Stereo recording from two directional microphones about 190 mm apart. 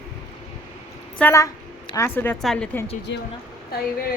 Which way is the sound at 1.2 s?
15° left (ahead or behind).